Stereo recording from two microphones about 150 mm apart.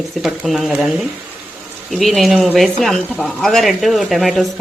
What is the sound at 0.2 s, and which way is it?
Speech, centre (ahead or behind).